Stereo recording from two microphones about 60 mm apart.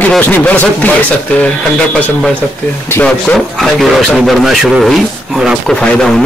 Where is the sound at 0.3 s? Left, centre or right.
Left.